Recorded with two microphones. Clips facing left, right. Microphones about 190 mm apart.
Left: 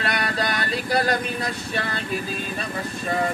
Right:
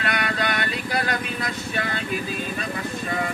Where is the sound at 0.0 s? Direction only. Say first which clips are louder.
Even; 35° left (ahead or behind).